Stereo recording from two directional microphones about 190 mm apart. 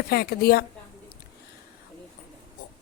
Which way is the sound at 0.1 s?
55° left (ahead or behind).